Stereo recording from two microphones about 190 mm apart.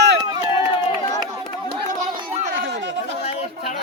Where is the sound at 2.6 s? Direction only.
65° right (ahead or behind).